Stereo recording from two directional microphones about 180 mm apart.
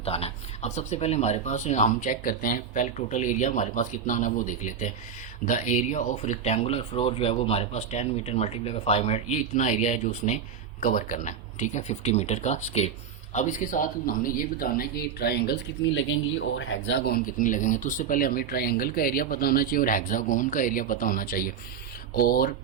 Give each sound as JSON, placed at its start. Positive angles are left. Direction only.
{"t": 0.0, "sound": "speech", "side_deg": 35}